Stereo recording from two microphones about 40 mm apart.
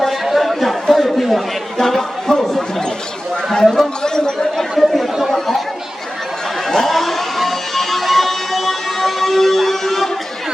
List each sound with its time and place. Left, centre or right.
0.3 s chatter: centre
1.8 s speech: centre
3.8 s chatter: centre
4.8 s chatter: centre
6.7 s music: centre